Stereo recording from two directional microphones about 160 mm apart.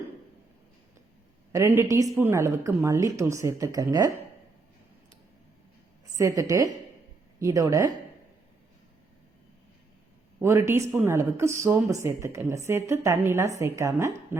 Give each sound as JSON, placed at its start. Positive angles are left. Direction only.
{"t": 1.5, "sound": "a woman's voice", "side_deg": -15}
{"t": 6.1, "sound": "a woman's voice", "side_deg": -20}
{"t": 10.4, "sound": "speech", "side_deg": -15}